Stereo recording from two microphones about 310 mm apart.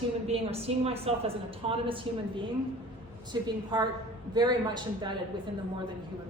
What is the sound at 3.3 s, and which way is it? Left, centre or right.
Speech, centre.